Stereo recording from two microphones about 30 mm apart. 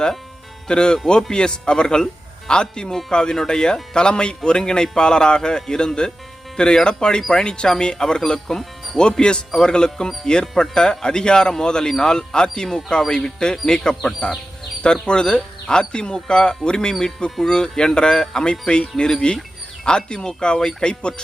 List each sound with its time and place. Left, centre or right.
0.7 s a man's voice: left